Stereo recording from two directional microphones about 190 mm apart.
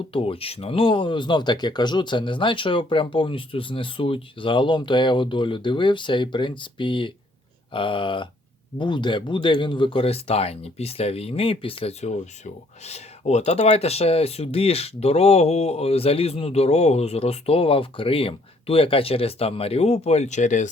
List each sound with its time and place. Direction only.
0.1 s speech: 30° left (ahead or behind)